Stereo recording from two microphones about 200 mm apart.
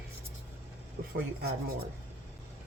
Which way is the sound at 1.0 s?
50° right (ahead or behind).